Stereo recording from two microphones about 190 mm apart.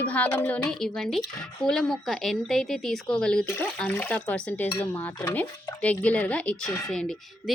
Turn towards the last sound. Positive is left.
turn(degrees=0)  # may be behind; listen again after turning